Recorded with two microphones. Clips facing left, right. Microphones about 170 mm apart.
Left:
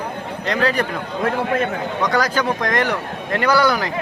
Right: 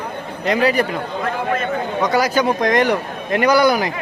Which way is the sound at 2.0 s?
10° right (ahead or behind).